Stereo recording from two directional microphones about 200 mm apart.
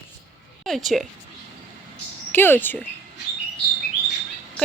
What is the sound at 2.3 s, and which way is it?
Speech, 10° left (ahead or behind).